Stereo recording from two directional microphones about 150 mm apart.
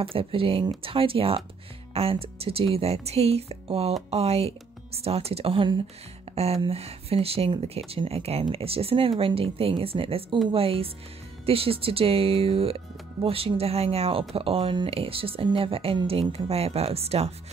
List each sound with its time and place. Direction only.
0.0 s speech: 40° right (ahead or behind)